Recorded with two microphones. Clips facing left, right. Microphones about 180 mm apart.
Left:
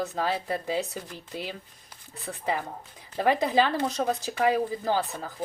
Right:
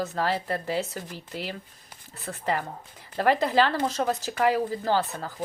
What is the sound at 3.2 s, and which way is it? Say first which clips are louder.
Speech: right 1 dB; 15° left (ahead or behind).